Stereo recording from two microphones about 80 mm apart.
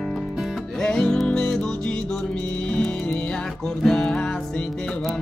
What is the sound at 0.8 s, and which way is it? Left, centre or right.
Music, centre.